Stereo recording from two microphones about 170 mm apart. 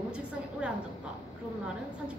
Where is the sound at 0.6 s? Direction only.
5° right (ahead or behind).